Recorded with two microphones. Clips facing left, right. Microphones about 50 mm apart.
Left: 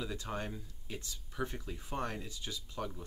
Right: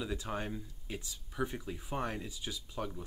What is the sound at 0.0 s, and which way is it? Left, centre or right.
Speech, centre.